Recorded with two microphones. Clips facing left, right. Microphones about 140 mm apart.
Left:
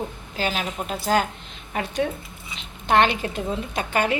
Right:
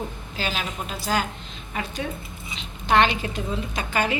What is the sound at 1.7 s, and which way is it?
Speech, 65° left (ahead or behind).